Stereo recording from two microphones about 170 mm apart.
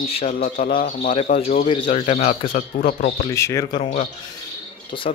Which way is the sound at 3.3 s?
20° left (ahead or behind).